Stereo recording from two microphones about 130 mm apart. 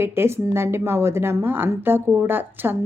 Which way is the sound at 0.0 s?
20° right (ahead or behind).